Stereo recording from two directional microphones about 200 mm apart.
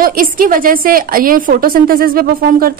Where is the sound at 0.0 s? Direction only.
45° right (ahead or behind).